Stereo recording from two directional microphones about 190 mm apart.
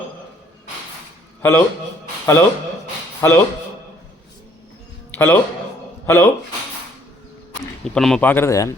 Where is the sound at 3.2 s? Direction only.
15° left (ahead or behind).